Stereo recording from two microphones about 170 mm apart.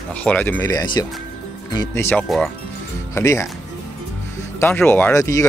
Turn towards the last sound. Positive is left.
turn(degrees=20)  # may be behind; listen again after turning